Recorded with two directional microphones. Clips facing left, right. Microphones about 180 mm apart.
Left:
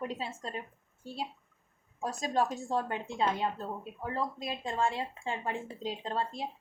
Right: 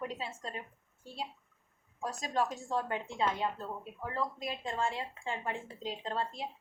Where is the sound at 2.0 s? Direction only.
35° left (ahead or behind).